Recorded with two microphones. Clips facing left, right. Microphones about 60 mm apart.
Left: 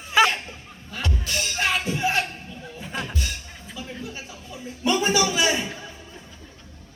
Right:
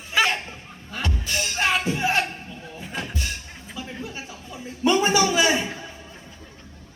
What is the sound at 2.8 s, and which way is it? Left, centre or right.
Music, centre.